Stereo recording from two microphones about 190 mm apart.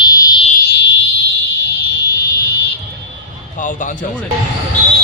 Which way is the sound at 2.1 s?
60° left (ahead or behind).